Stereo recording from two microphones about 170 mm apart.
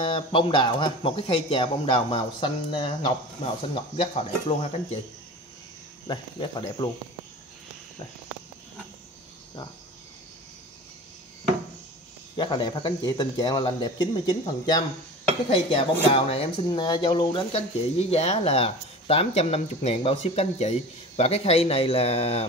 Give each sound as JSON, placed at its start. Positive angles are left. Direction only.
{"t": 0.0, "sound": "speech", "side_deg": 30}
{"t": 6.0, "sound": "speech", "side_deg": 25}
{"t": 12.4, "sound": "speech", "side_deg": 25}